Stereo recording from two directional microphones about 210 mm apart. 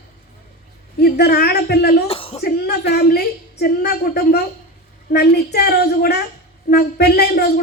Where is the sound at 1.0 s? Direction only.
50° left (ahead or behind).